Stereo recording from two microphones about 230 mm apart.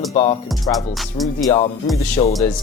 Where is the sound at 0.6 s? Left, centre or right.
Centre.